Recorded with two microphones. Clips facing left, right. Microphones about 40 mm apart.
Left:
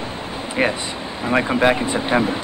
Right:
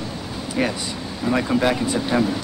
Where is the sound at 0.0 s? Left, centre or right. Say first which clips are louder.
Left 2 dB; left.